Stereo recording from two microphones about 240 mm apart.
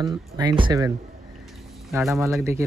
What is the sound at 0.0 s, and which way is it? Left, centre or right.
Speech, centre.